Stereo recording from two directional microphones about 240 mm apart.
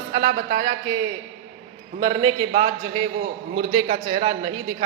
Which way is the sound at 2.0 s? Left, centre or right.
Centre.